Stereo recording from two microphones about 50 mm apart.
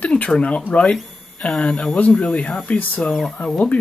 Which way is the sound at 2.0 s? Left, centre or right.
Left.